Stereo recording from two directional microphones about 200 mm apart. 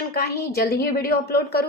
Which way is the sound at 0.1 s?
50° left (ahead or behind).